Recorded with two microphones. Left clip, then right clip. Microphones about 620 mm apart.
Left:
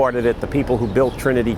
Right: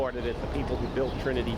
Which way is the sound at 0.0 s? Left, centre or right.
Left.